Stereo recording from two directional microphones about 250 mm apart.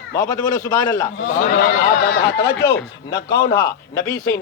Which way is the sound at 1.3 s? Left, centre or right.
Left.